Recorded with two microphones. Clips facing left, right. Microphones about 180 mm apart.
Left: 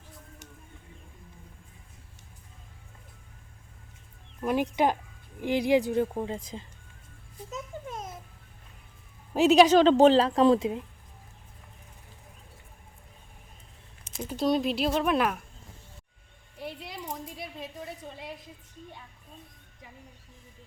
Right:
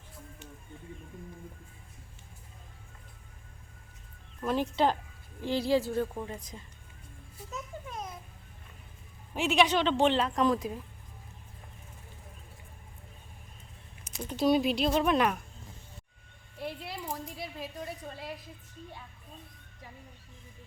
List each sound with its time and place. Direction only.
4.4 s speech: 15° left (ahead or behind)
9.3 s a woman's voice: 40° left (ahead or behind)
14.3 s speech: centre (ahead or behind)
16.8 s a woman's voice: 5° right (ahead or behind)